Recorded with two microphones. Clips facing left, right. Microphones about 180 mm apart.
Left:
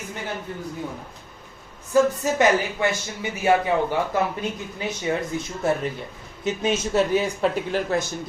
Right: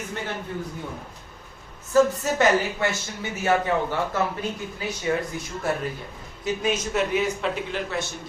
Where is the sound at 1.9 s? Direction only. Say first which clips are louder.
Even; 15° left (ahead or behind).